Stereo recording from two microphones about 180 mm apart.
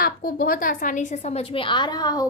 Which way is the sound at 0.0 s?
55° left (ahead or behind).